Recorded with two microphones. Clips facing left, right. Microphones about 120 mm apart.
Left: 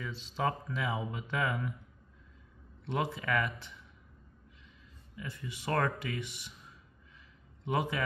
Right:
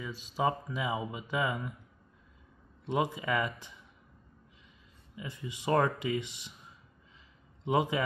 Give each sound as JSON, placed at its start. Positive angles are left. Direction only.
{"t": 0.0, "sound": "speech", "side_deg": -10}
{"t": 2.8, "sound": "speech", "side_deg": -15}
{"t": 5.1, "sound": "speech", "side_deg": -20}
{"t": 7.6, "sound": "speech", "side_deg": -20}